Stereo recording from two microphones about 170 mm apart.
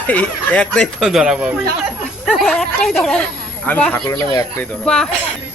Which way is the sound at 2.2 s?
Centre (ahead or behind).